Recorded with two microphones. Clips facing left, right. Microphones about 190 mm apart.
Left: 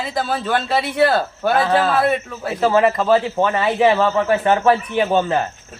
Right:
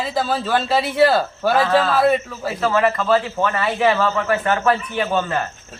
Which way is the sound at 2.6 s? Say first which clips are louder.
Left 3 dB; 20° left (ahead or behind).